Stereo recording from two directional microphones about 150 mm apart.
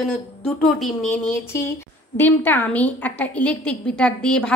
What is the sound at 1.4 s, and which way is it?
A woman's voice, 15° left (ahead or behind).